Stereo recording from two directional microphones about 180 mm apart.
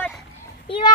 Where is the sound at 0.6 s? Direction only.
30° left (ahead or behind).